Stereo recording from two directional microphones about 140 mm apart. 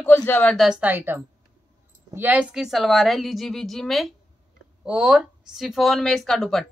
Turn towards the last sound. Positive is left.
turn(degrees=0)  # may be behind; listen again after turning